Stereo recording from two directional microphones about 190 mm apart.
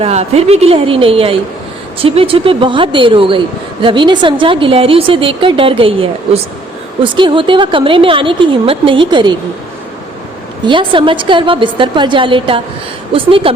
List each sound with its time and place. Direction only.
0.0 s a woman's voice: 35° right (ahead or behind)
10.7 s a woman's voice: 25° right (ahead or behind)